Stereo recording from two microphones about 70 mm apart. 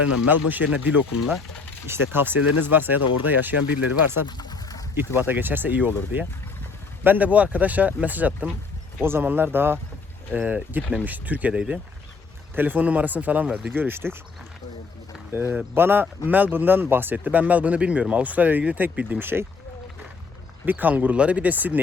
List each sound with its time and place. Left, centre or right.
0.0 s speech: right
4.3 s pigeon: left
4.9 s speech: right
7.0 s speech: right
15.3 s speech: right
20.7 s speech: right